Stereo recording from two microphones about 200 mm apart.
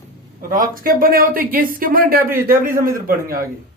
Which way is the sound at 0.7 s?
45° right (ahead or behind).